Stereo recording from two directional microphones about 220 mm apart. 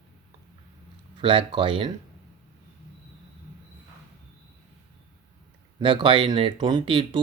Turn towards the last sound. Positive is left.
turn(degrees=-20)  # may be behind; listen again after turning